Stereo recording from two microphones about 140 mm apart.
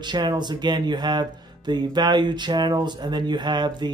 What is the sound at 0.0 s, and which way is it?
Speech, 30° right (ahead or behind).